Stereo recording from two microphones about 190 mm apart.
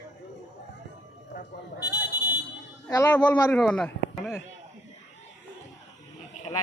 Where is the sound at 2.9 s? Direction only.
10° left (ahead or behind).